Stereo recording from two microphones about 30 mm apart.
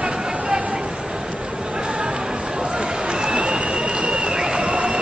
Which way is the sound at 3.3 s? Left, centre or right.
Right.